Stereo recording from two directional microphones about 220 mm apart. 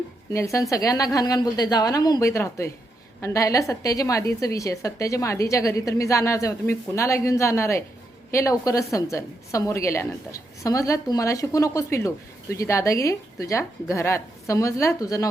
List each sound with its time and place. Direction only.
0.3 s a woman's voice: 15° left (ahead or behind)